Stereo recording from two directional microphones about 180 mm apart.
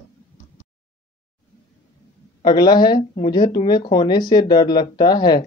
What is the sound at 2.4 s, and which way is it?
Speech, 25° left (ahead or behind).